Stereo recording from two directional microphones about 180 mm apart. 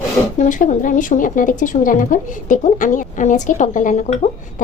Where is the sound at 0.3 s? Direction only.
45° left (ahead or behind).